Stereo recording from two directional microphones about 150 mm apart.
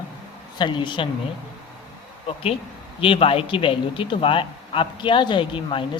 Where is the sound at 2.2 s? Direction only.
40° left (ahead or behind).